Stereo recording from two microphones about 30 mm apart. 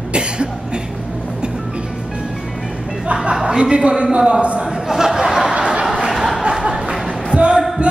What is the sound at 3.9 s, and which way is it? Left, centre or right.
Speech, right.